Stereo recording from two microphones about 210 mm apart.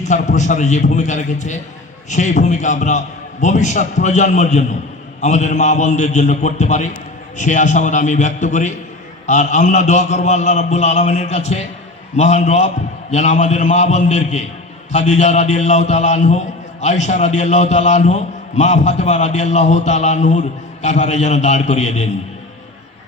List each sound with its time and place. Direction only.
0.0 s a man's voice: 35° left (ahead or behind)